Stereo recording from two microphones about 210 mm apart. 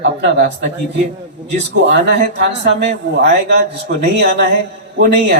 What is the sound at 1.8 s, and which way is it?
A man's voice, 55° right (ahead or behind).